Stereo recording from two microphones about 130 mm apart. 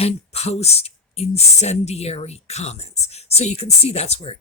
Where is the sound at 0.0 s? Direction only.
55° left (ahead or behind).